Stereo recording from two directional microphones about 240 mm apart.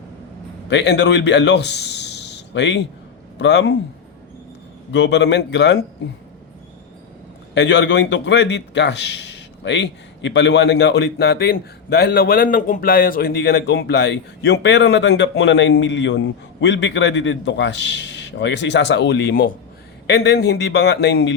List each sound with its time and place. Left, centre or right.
0.7 s a man's voice: left
4.9 s a man's voice: left
7.5 s a man's voice: left